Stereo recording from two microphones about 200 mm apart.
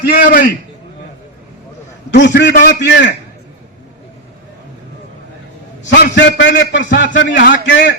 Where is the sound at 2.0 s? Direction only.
60° left (ahead or behind).